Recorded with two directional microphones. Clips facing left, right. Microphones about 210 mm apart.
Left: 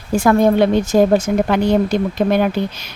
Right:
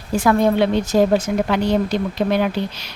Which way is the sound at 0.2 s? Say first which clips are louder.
Left 3 dB; 45° left (ahead or behind).